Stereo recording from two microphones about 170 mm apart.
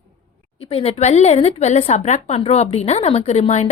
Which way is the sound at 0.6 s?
35° left (ahead or behind).